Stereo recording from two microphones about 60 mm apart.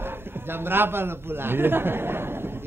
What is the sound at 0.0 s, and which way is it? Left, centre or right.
A man's voice, right.